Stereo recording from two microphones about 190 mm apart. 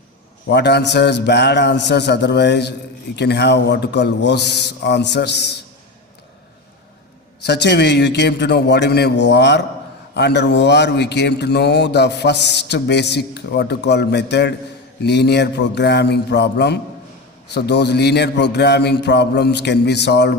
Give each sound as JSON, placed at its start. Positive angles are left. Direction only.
{"t": 0.4, "sound": "a man's voice", "side_deg": 65}
{"t": 7.4, "sound": "a man's voice", "side_deg": 60}